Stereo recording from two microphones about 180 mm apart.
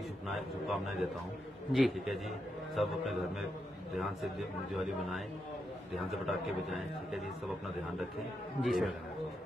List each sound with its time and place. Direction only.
0.3 s a man's voice: centre (ahead or behind)
6.2 s a man's voice: centre (ahead or behind)
8.6 s a man's voice: centre (ahead or behind)